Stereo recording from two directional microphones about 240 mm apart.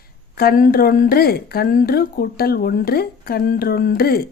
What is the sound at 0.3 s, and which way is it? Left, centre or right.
Speech, left.